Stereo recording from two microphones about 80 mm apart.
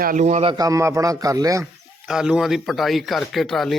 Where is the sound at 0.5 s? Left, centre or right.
Right.